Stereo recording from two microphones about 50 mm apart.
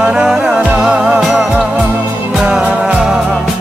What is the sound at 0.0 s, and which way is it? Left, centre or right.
Music, centre.